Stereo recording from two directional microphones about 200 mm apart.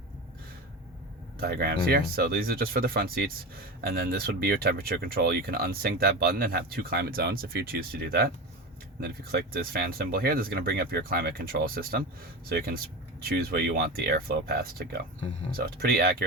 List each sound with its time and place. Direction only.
1.4 s speech: 50° right (ahead or behind)